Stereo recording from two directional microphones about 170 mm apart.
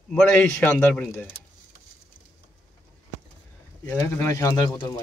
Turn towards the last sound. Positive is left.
turn(degrees=20)  # may be behind; listen again after turning